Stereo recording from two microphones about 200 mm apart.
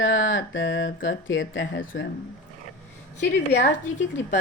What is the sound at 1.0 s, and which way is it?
Speech, 65° left (ahead or behind).